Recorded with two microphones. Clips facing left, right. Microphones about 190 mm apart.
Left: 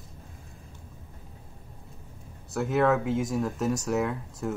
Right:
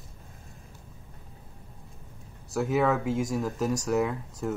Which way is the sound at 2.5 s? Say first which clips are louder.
Left 1 dB; centre (ahead or behind).